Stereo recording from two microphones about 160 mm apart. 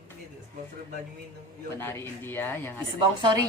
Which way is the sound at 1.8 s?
15° left (ahead or behind).